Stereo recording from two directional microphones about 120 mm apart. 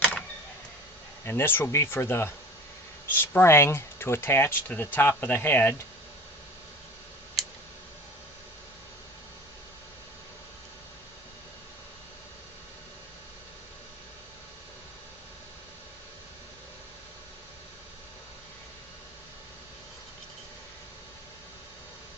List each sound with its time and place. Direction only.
1.2 s speech: 20° left (ahead or behind)